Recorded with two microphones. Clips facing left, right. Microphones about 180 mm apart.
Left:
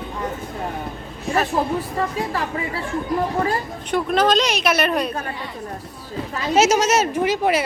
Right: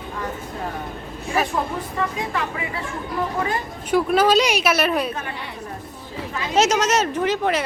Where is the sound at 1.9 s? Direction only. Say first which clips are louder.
Left 2 dB; 35° left (ahead or behind).